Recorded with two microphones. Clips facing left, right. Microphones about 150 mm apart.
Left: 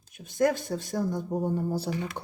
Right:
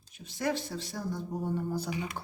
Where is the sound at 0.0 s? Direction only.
50° left (ahead or behind).